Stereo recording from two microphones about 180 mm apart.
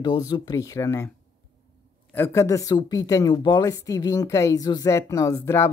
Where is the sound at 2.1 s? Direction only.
15° left (ahead or behind).